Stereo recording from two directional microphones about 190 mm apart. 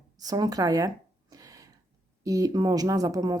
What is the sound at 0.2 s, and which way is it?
Speech, 20° right (ahead or behind).